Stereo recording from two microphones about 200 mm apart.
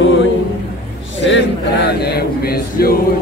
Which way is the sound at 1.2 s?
60° left (ahead or behind).